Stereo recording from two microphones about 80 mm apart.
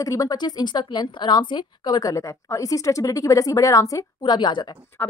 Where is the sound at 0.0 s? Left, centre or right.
Left.